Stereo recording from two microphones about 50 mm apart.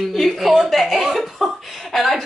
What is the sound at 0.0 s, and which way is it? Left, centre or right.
Chuckle, centre.